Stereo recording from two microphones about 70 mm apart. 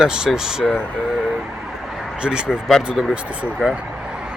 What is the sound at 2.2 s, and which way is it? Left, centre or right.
Speech, centre.